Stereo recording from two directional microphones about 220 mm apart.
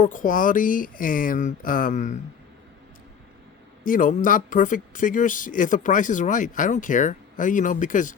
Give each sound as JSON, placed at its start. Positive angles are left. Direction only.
{"t": 0.0, "sound": "speech", "side_deg": 35}
{"t": 3.8, "sound": "speech", "side_deg": 35}